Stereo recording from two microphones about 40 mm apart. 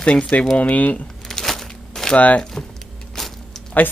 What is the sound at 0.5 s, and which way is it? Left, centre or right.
Speech, left.